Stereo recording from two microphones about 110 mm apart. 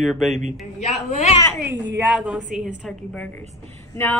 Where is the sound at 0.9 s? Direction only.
85° left.